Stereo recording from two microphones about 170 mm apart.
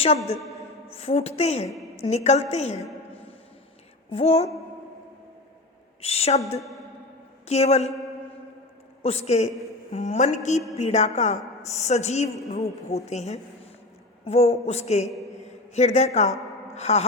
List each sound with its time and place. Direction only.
0.9 s a woman's voice: 35° left (ahead or behind)
4.1 s a woman's voice: 40° left (ahead or behind)
6.0 s a woman's voice: 35° left (ahead or behind)
6.6 s speech: centre (ahead or behind)
7.4 s a woman's voice: 40° left (ahead or behind)
9.0 s a woman's voice: 40° left (ahead or behind)